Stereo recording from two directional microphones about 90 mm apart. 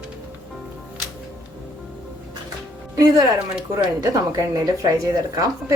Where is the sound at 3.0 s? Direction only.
40° right (ahead or behind).